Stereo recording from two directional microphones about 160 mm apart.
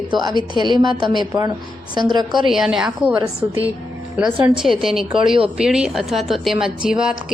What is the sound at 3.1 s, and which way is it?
Speech, 20° right (ahead or behind).